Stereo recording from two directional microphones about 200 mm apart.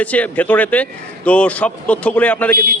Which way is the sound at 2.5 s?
50° right (ahead or behind).